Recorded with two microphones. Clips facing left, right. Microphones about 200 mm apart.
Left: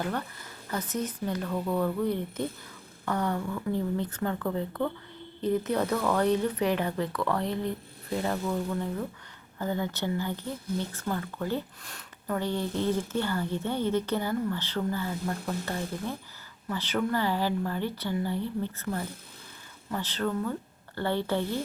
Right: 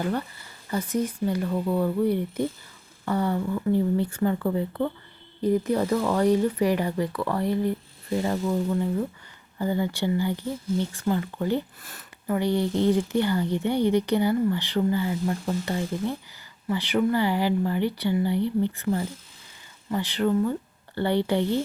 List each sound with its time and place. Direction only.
0.1 s speech: 10° right (ahead or behind)
11.8 s speech: 5° right (ahead or behind)